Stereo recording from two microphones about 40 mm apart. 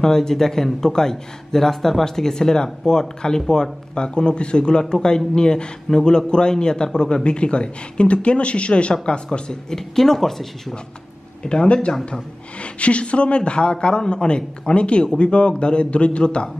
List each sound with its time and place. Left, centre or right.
0.0 s a man's voice: centre
11.4 s a woman's voice: left